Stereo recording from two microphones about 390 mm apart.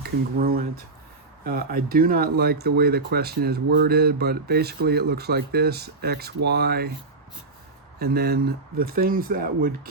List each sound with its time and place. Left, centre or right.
0.0 s speech: right
7.9 s speech: right